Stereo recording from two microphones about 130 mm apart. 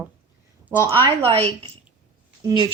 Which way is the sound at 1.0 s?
45° right (ahead or behind).